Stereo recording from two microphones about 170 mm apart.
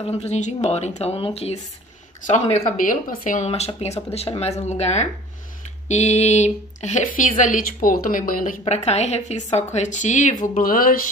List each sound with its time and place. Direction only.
0.0 s speech: 35° left (ahead or behind)
2.9 s speech: 50° left (ahead or behind)